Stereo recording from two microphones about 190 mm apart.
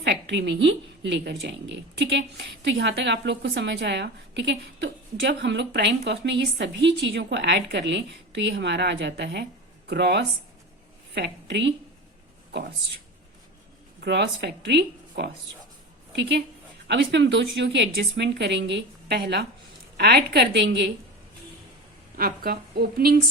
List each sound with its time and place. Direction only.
0.0 s a woman's voice: 65° right (ahead or behind)
14.0 s speech: 60° right (ahead or behind)
16.9 s a woman's voice: 70° right (ahead or behind)
22.2 s a woman's voice: 55° right (ahead or behind)